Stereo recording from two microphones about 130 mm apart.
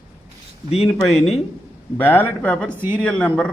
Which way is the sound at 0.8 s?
Centre (ahead or behind).